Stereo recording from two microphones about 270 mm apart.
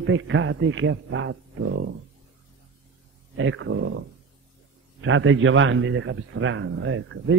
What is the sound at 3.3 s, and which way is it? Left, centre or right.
A man's voice, right.